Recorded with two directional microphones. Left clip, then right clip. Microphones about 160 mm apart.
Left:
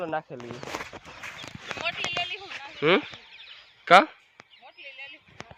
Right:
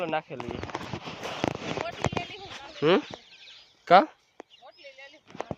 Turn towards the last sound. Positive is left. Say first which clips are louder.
# left 5 dB
turn(degrees=-15)  # may be behind; listen again after turning